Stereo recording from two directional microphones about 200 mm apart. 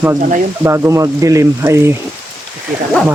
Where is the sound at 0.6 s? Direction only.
10° right (ahead or behind).